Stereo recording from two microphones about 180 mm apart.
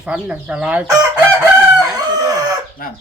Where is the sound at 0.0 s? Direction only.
5° right (ahead or behind).